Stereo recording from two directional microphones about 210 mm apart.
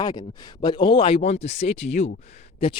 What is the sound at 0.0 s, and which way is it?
Speech, 20° left (ahead or behind).